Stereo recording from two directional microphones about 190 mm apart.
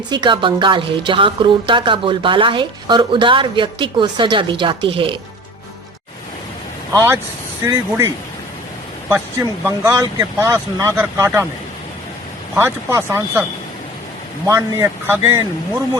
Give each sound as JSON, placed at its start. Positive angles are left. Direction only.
{"t": 0.1, "sound": "a woman's voice", "side_deg": -25}
{"t": 6.9, "sound": "speech", "side_deg": -15}
{"t": 12.5, "sound": "speech", "side_deg": -15}
{"t": 14.4, "sound": "speech", "side_deg": -15}